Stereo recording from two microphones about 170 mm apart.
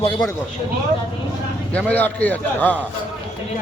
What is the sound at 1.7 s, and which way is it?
Speech, 10° left (ahead or behind).